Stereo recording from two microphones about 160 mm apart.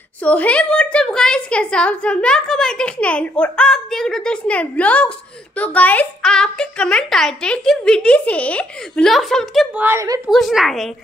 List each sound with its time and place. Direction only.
0.2 s a woman's voice: 10° left (ahead or behind)
9.8 s a woman's voice: 15° right (ahead or behind)
10.2 s a woman's voice: centre (ahead or behind)